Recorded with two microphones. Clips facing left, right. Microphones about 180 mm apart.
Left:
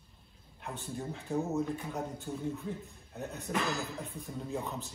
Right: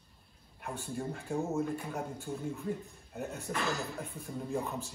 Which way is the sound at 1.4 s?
Centre (ahead or behind).